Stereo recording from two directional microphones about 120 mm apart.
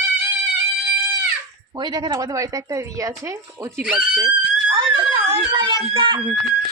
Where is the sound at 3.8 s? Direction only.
10° right (ahead or behind).